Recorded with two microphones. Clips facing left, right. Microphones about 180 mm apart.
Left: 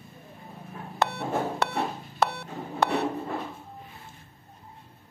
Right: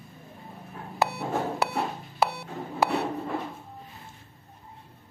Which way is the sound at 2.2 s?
5° right (ahead or behind).